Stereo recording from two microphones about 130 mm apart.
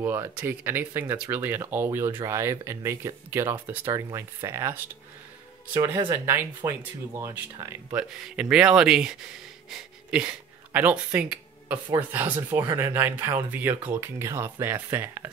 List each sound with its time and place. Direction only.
0.0 s speech: 20° right (ahead or behind)
5.9 s speech: 20° right (ahead or behind)